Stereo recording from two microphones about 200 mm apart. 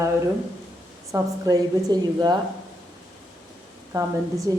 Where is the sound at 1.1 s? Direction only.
20° right (ahead or behind).